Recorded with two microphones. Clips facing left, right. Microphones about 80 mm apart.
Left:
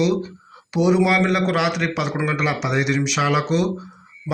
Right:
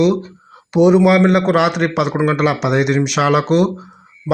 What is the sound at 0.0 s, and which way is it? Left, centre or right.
A man's voice, right.